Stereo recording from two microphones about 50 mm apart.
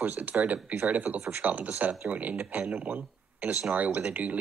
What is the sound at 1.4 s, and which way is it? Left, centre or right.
Speech, right.